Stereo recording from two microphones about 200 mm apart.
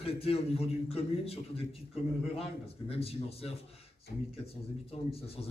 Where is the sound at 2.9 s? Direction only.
30° left (ahead or behind).